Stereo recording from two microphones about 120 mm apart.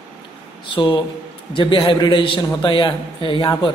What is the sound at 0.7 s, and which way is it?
A man's voice, 40° left (ahead or behind).